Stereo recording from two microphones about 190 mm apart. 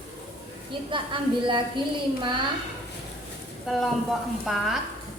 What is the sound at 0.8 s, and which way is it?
Speech, 25° right (ahead or behind).